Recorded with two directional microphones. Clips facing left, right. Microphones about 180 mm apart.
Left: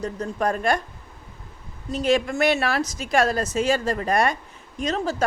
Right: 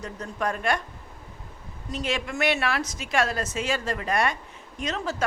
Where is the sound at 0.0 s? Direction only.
35° left (ahead or behind).